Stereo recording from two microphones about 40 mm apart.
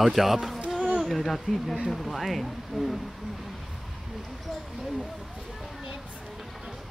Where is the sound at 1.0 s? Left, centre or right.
Centre.